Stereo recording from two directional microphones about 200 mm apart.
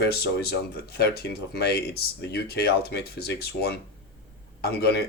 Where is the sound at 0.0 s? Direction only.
55° left (ahead or behind).